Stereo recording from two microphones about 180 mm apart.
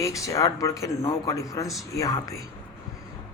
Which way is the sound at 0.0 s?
15° left (ahead or behind).